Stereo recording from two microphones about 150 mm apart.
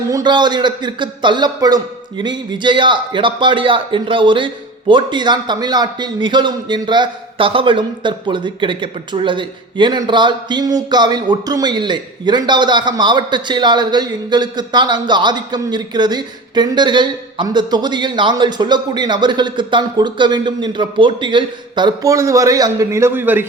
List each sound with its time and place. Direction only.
0.1 s speech: 30° right (ahead or behind)